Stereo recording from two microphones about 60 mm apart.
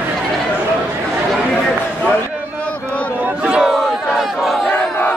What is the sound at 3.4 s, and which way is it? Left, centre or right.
Battle cry, centre.